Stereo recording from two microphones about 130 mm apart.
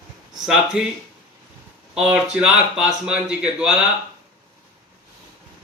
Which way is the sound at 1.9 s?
5° right (ahead or behind).